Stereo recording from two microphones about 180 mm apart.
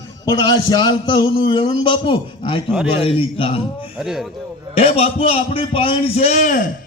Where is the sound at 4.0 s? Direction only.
Centre (ahead or behind).